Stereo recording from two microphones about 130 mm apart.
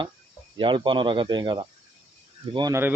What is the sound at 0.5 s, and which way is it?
Speech, 40° right (ahead or behind).